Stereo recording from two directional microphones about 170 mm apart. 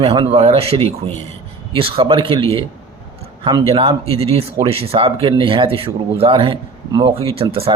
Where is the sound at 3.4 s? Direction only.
30° right (ahead or behind).